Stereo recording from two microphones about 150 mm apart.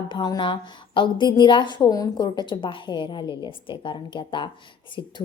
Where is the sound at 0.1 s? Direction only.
30° left (ahead or behind).